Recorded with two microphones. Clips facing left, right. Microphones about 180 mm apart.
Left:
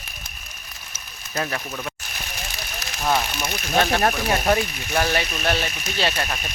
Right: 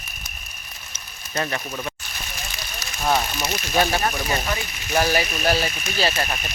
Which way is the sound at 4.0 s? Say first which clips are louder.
Left 3 dB; 60° left (ahead or behind).